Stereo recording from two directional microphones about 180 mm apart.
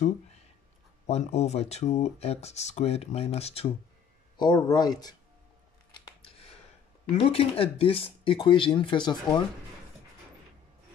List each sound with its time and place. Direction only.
1.0 s speech: 35° left (ahead or behind)
4.4 s speech: 25° left (ahead or behind)
6.0 s a sound: 30° left (ahead or behind)
7.2 s speech: 35° left (ahead or behind)